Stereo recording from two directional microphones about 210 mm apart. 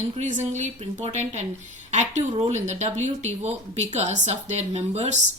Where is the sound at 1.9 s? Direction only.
35° right (ahead or behind).